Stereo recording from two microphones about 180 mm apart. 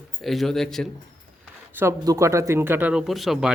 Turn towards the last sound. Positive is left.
turn(degrees=0)  # may be behind; listen again after turning